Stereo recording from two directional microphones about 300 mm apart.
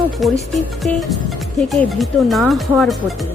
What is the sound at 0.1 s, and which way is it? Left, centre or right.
A woman's voice, centre.